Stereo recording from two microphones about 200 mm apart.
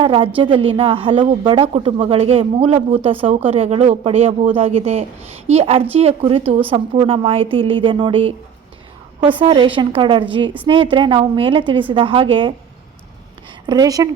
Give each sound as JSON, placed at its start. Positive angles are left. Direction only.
{"t": 0.0, "sound": "a woman's voice", "side_deg": -25}
{"t": 13.7, "sound": "a woman's voice", "side_deg": -20}